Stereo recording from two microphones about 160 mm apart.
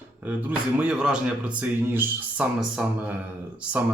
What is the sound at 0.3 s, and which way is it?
Speech, 10° right (ahead or behind).